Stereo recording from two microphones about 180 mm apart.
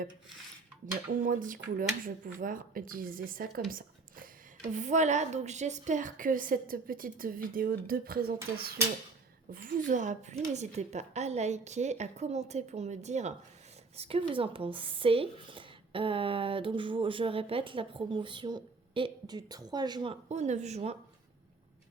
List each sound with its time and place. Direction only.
1.2 s a woman's voice: 50° right (ahead or behind)
3.7 s squish: 50° right (ahead or behind)
4.8 s a woman's voice: 40° right (ahead or behind)
9.5 s a woman's voice: 50° right (ahead or behind); by 20.1 s 25° right (ahead or behind)
20.2 s a woman's voice: 40° right (ahead or behind)